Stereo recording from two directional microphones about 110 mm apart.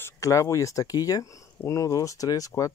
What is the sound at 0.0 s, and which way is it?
Speech, 30° left (ahead or behind).